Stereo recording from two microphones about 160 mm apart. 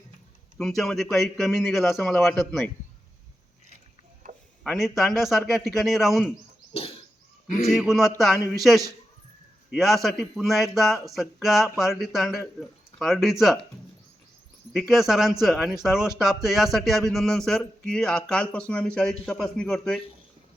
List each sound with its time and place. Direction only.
0.6 s speech: 5° left (ahead or behind)
4.6 s speech: centre (ahead or behind)
7.4 s a man's voice: 50° left (ahead or behind)
7.8 s speech: centre (ahead or behind)
14.7 s speech: centre (ahead or behind)